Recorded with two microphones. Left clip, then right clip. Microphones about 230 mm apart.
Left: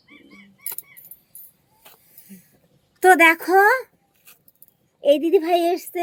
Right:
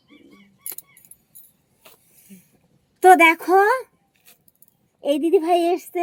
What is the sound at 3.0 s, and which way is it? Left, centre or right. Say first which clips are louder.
Speech: right 1 dB; centre.